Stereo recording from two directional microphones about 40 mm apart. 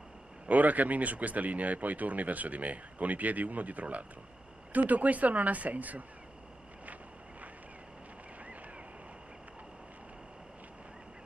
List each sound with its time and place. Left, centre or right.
0.5 s speech: right